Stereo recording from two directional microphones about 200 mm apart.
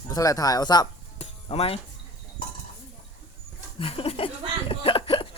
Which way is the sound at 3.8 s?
25° left (ahead or behind).